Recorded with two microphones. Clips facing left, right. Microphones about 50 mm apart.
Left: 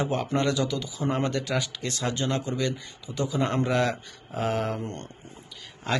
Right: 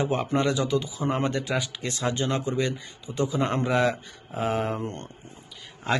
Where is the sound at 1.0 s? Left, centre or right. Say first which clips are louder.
Right 1 dB; centre.